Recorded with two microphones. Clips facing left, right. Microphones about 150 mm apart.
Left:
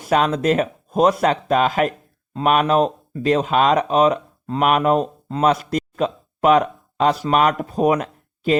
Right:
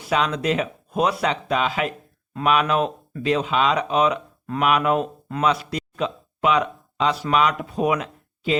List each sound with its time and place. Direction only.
0.0 s speech: 45° left (ahead or behind)
3.2 s speech: 45° left (ahead or behind)